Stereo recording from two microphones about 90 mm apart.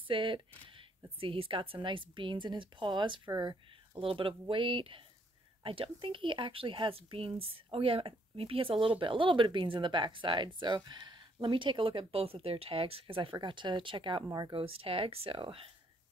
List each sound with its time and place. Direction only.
0.1 s speech: 70° right (ahead or behind)
0.7 s speech: 85° right; by 3.2 s 65° right (ahead or behind)
3.3 s speech: 50° right (ahead or behind)
4.0 s speech: 85° right
8.8 s speech: 75° right (ahead or behind)
14.5 s speech: 90° right